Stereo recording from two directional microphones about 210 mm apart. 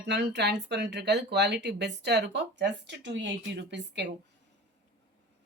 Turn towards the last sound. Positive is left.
turn(degrees=-55)  # may be behind; listen again after turning